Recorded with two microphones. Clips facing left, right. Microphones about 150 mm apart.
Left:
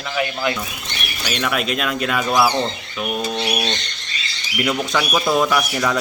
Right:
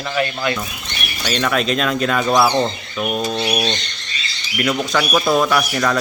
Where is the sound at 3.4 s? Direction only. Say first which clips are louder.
Right 2 dB; 15° right (ahead or behind).